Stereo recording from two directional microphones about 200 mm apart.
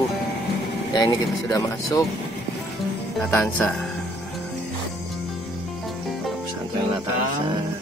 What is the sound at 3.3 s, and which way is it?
Speech, 5° left (ahead or behind).